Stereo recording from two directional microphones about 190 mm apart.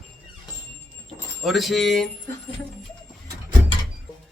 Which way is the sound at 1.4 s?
Centre (ahead or behind).